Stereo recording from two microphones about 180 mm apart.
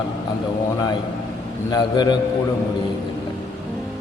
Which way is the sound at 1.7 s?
25° left (ahead or behind).